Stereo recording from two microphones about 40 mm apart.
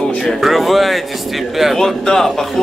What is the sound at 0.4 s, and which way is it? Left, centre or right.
Speech, centre.